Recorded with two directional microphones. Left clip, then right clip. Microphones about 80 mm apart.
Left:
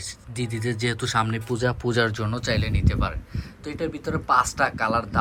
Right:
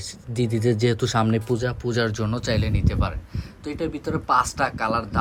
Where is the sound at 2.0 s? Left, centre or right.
Right.